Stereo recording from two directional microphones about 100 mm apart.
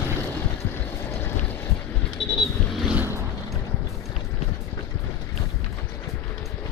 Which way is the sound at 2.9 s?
25° right (ahead or behind).